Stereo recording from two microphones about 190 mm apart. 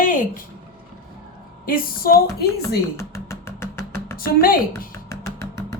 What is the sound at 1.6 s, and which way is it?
Speech, 50° left (ahead or behind).